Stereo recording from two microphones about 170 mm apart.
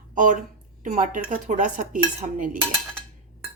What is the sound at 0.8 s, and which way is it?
Dishes, 50° right (ahead or behind).